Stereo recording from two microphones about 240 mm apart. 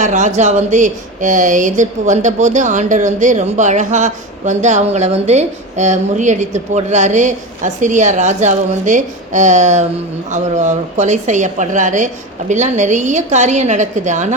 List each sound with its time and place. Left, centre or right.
0.0 s a woman's voice: right